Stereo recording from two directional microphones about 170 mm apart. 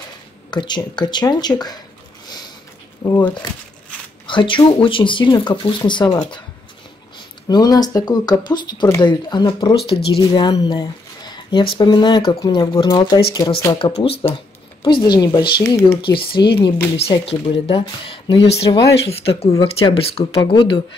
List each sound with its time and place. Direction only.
0.5 s speech: 25° left (ahead or behind)
3.1 s speech: 10° left (ahead or behind)
4.3 s speech: 30° left (ahead or behind)
7.4 s speech: 25° left (ahead or behind)
16.3 s speech: 30° left (ahead or behind)
19.5 s speech: 15° left (ahead or behind)
19.9 s speech: 35° left (ahead or behind)